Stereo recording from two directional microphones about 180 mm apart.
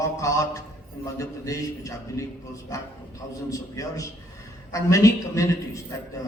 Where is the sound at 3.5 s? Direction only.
20° left (ahead or behind).